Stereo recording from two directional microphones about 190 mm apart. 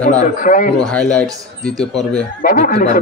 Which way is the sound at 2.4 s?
50° left (ahead or behind).